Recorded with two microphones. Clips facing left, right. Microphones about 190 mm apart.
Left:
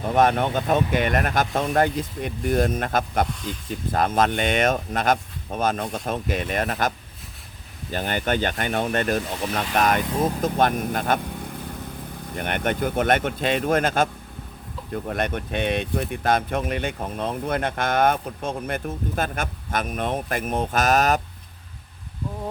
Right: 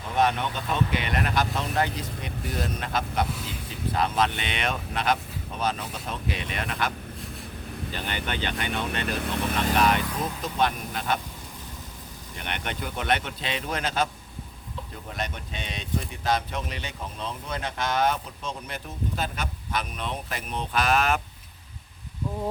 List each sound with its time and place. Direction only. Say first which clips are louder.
0.0 s speech: left 5 dB; 50° left (ahead or behind)
7.9 s speech: left 9 dB; 45° left (ahead or behind)
9.3 s speech: left 1 dB; 55° right (ahead or behind)
9.7 s speech: left 2 dB; 45° left (ahead or behind)
10.1 s speech: left 8 dB; 25° left (ahead or behind)
10.4 s speech: left 6 dB; 50° left (ahead or behind)
12.3 s speech: left 9 dB; 50° left (ahead or behind)